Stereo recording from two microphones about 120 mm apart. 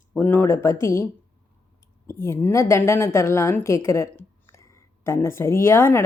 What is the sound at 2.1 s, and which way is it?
A woman's voice, 20° left (ahead or behind).